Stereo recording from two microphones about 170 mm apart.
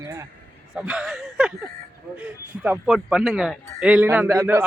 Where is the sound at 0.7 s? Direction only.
5° right (ahead or behind).